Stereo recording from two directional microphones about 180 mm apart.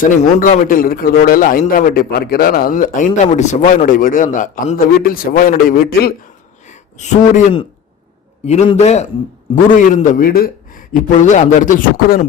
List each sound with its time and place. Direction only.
0.0 s a man's voice: 45° left (ahead or behind)
6.7 s a man's voice: 40° left (ahead or behind)
9.9 s a man's voice: 50° left (ahead or behind)